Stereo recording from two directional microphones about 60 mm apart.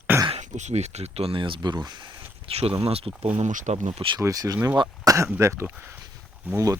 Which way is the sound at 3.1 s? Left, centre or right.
Right.